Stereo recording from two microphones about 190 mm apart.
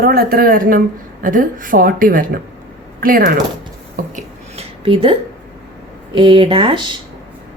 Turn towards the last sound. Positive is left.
turn(degrees=-25)  # may be behind; listen again after turning